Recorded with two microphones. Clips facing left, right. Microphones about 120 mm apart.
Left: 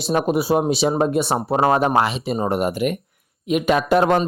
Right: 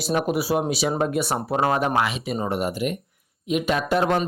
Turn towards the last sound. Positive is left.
turn(degrees=55)  # may be behind; listen again after turning